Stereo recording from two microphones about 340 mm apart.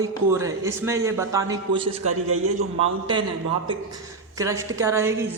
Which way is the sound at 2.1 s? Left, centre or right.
Right.